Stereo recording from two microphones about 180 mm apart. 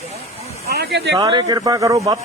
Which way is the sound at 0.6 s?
60° right (ahead or behind).